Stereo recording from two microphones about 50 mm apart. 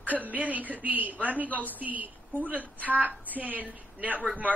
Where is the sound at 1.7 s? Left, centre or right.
Right.